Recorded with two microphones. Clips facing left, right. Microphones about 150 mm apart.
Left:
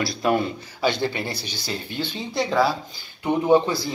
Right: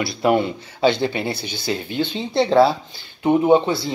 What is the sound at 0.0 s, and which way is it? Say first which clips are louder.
Speech: right 4 dB; 25° right (ahead or behind).